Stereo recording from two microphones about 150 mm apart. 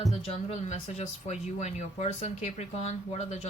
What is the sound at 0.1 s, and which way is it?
Speech, 45° left (ahead or behind).